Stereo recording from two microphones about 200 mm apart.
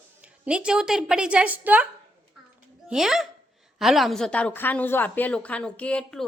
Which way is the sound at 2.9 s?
Centre (ahead or behind).